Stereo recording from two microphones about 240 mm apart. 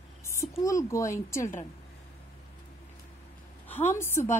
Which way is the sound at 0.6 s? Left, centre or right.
Centre.